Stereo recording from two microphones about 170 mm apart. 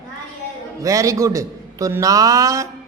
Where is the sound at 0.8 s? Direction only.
20° right (ahead or behind).